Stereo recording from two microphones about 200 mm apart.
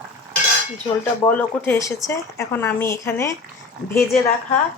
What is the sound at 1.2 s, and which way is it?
Speech, 10° left (ahead or behind).